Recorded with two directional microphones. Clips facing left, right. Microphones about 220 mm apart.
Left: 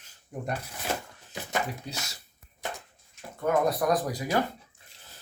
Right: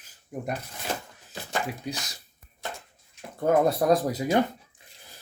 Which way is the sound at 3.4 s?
25° right (ahead or behind).